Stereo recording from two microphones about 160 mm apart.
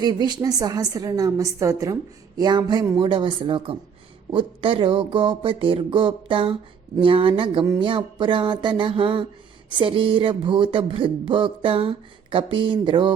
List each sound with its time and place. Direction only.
0.0 s a woman's voice: 25° right (ahead or behind)